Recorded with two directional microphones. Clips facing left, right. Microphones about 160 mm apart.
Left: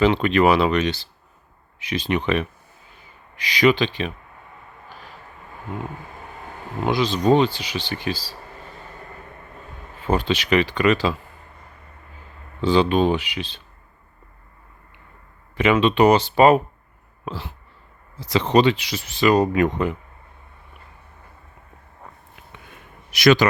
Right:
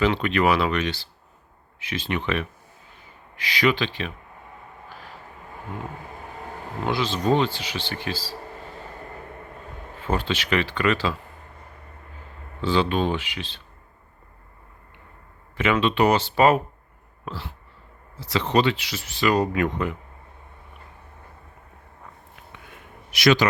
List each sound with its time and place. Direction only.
0.0 s speech: 25° left (ahead or behind)
6.8 s speech: 15° left (ahead or behind)
10.1 s speech: 15° left (ahead or behind)
12.6 s speech: 15° left (ahead or behind)
15.5 s speech: 20° left (ahead or behind)
17.2 s a sound: 20° left (ahead or behind)
18.2 s speech: 20° left (ahead or behind)
23.1 s a man's voice: 50° left (ahead or behind)